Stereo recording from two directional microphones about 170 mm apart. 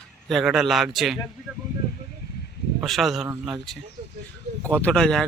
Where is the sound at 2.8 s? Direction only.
Centre (ahead or behind).